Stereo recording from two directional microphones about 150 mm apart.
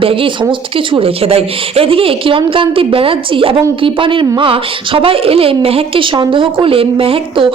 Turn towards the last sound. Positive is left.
turn(degrees=-40)  # may be behind; listen again after turning